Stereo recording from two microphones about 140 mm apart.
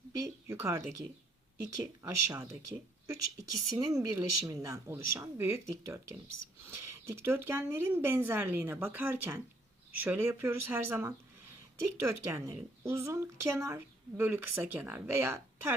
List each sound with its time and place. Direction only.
0.2 s a woman's voice: 20° right (ahead or behind)